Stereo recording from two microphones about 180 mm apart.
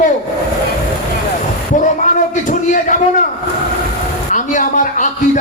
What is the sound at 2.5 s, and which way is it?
Speech, 45° left (ahead or behind).